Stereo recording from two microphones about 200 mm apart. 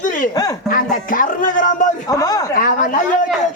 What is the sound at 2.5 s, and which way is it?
Speech, 45° left (ahead or behind).